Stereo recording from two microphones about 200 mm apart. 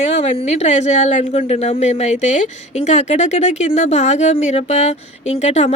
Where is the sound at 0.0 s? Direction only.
35° left (ahead or behind).